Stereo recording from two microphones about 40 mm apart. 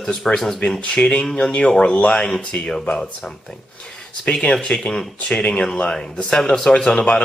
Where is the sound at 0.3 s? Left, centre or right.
Centre.